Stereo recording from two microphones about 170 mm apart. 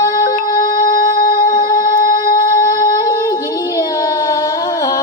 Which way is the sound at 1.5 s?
20° left (ahead or behind).